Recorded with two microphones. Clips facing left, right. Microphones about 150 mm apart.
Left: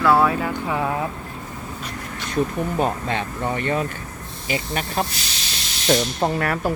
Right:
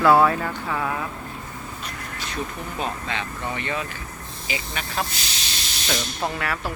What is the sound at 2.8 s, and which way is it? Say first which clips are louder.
Speech: left 4 dB; 50° left (ahead or behind).